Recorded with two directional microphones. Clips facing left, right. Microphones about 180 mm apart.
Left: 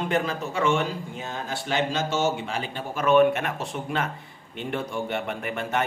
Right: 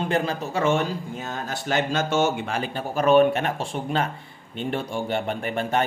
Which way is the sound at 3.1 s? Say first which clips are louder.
Right 1 dB; 35° right (ahead or behind).